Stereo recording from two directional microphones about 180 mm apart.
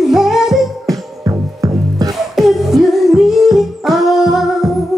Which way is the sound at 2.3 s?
Centre (ahead or behind).